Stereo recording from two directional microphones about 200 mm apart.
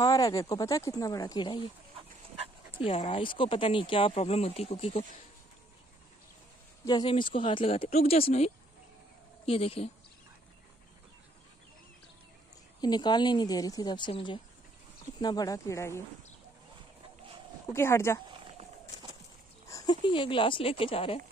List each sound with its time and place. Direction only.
0.0 s speech: 20° left (ahead or behind)
2.8 s speech: 25° left (ahead or behind)
6.8 s speech: 20° left (ahead or behind)
9.5 s speech: 30° left (ahead or behind)
12.8 s speech: 20° left (ahead or behind)
17.7 s speech: 10° left (ahead or behind)
18.3 s a sound: 25° right (ahead or behind)
19.7 s speech: 20° left (ahead or behind)